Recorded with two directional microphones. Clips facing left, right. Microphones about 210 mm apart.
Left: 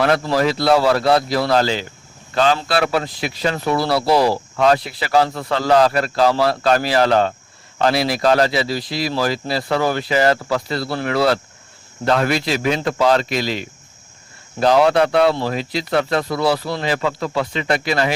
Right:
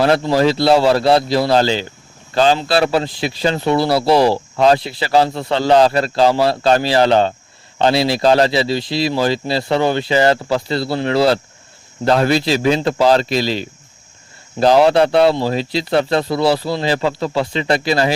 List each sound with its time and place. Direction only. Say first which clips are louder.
0.0 s speech: right 3 dB; 25° right (ahead or behind)